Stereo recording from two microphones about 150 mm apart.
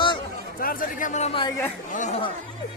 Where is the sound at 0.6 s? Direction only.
70° left (ahead or behind).